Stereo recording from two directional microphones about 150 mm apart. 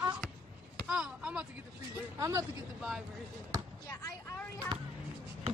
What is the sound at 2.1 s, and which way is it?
Speech, 20° right (ahead or behind).